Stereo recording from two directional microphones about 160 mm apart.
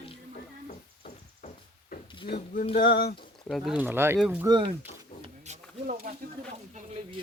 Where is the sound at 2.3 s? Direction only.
55° left (ahead or behind).